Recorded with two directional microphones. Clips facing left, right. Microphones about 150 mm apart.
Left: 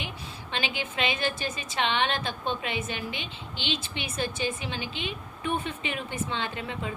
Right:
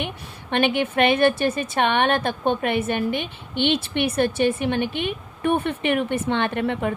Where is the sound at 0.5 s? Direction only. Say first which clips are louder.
Right 12 dB; 60° right (ahead or behind).